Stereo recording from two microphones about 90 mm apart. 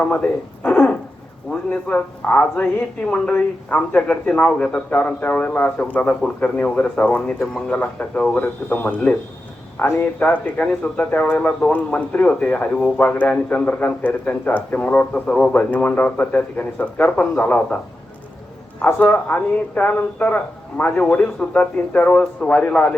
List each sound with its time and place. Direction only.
0.0 s speech: 15° left (ahead or behind)
18.9 s speech: 15° left (ahead or behind)